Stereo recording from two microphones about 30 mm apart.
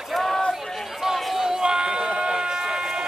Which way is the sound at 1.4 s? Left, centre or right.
Right.